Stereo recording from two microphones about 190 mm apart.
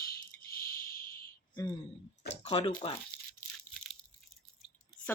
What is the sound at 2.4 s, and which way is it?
Speech, 30° left (ahead or behind).